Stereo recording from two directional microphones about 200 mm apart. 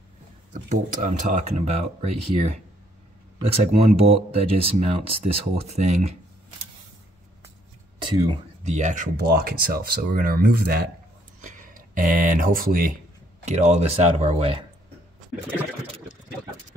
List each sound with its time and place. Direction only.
0.5 s speech: 40° right (ahead or behind)
8.0 s speech: 25° right (ahead or behind); by 12.9 s 45° right (ahead or behind)
13.5 s speech: 35° right (ahead or behind)